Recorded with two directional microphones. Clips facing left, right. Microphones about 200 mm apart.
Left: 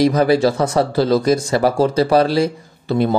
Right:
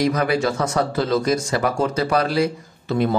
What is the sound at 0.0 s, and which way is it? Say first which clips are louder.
Speech: left 6 dB; 30° left (ahead or behind).